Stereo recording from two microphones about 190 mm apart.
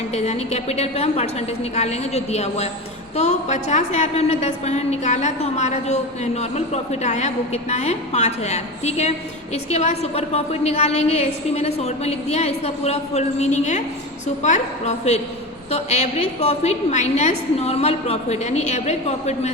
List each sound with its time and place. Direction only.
0.1 s a woman's voice: 35° left (ahead or behind)